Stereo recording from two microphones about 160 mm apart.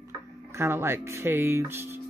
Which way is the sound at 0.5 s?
15° right (ahead or behind).